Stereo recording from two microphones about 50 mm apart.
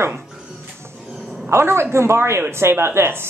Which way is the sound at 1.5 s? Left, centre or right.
Right.